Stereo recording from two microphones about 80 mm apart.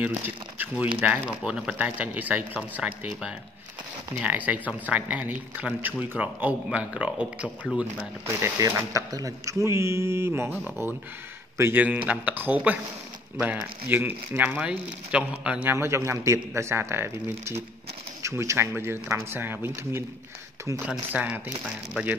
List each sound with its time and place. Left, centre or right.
0.0 s speech: right
3.1 s speech: centre
4.2 s speech: centre
8.5 s a man's voice: right
11.8 s speech: centre
15.6 s speech: right
21.1 s speech: centre